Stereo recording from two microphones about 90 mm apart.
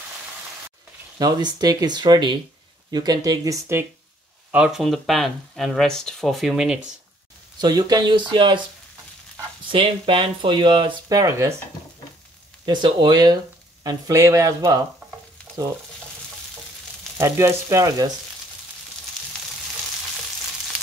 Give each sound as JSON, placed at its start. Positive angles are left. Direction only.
{"t": 1.1, "sound": "speech", "side_deg": -50}
{"t": 4.5, "sound": "speech", "side_deg": -10}
{"t": 7.6, "sound": "speech", "side_deg": -50}
{"t": 9.7, "sound": "speech", "side_deg": -70}
{"t": 11.1, "sound": "speech", "side_deg": -40}
{"t": 12.6, "sound": "speech", "side_deg": -60}
{"t": 13.8, "sound": "speech", "side_deg": -40}
{"t": 17.2, "sound": "speech", "side_deg": -30}